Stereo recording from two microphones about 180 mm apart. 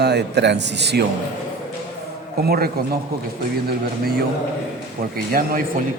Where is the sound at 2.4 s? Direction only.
60° right (ahead or behind).